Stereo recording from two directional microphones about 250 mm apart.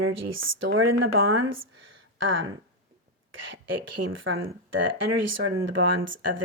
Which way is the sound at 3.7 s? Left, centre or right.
Right.